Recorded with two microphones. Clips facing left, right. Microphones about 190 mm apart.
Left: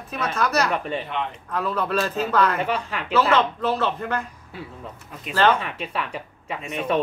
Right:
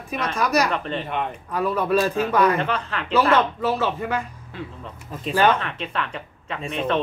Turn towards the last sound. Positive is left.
turn(degrees=-30)  # may be behind; listen again after turning